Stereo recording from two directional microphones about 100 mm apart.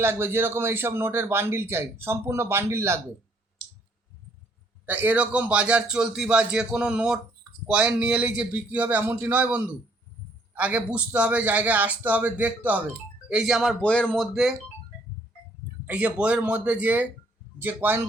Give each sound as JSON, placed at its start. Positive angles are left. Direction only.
{"t": 0.0, "sound": "speech", "side_deg": -25}
{"t": 4.9, "sound": "a man's voice", "side_deg": -20}
{"t": 13.2, "sound": "speech", "side_deg": -5}
{"t": 13.7, "sound": "speech", "side_deg": 10}
{"t": 15.9, "sound": "a man's voice", "side_deg": -15}